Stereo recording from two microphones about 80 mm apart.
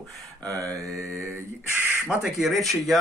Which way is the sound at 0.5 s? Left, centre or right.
Right.